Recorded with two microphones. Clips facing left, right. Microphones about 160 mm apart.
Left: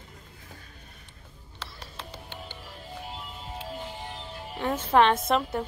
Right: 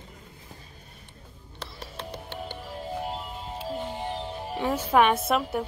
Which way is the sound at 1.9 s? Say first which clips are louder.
Right 6 dB; 65° right (ahead or behind).